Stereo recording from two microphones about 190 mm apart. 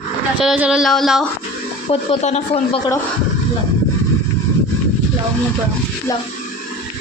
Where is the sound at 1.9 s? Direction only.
35° left (ahead or behind).